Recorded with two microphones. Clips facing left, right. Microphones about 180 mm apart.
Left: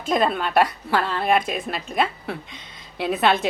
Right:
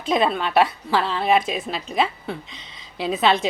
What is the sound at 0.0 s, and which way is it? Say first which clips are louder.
A woman's voice: right 1 dB; centre (ahead or behind).